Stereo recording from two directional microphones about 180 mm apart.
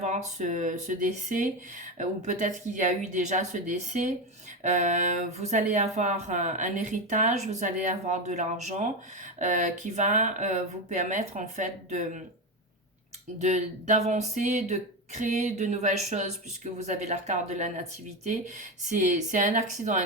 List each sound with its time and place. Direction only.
0.0 s speech: 40° right (ahead or behind)
13.4 s speech: 40° right (ahead or behind)